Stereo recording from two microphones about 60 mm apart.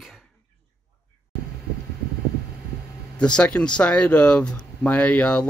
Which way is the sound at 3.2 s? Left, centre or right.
Centre.